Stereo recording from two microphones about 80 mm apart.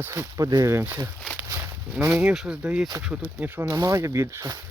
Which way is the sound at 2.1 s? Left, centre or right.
Centre.